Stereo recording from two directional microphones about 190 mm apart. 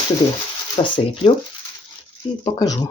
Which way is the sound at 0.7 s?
30° left (ahead or behind).